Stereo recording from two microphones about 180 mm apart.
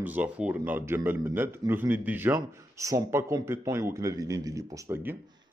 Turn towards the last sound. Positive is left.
turn(degrees=-10)  # may be behind; listen again after turning